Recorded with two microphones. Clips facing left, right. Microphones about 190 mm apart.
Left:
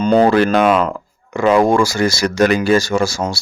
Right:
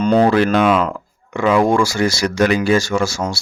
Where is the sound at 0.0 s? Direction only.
30° left (ahead or behind).